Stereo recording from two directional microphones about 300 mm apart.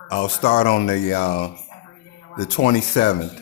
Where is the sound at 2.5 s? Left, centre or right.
Centre.